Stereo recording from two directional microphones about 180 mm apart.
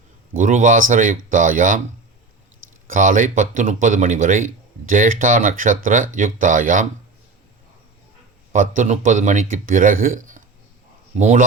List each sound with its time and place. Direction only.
0.3 s speech: 45° right (ahead or behind)
2.8 s speech: 50° right (ahead or behind)
8.5 s speech: 45° right (ahead or behind)